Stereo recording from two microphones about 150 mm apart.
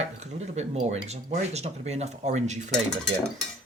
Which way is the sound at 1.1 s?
45° right (ahead or behind).